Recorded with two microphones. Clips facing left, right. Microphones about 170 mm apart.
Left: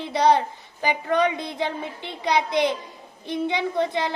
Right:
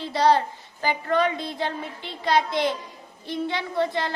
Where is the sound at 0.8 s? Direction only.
15° left (ahead or behind).